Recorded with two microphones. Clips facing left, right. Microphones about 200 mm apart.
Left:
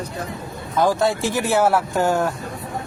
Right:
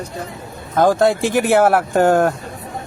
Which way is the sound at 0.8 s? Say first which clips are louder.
Right 5 dB; 55° right (ahead or behind).